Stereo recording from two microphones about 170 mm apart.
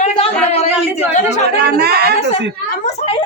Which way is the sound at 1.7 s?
70° right (ahead or behind).